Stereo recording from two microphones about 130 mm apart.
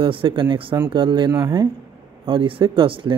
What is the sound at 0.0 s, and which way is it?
Speech, 40° right (ahead or behind).